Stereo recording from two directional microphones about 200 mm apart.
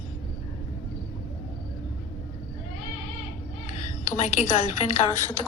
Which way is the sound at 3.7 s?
35° left (ahead or behind).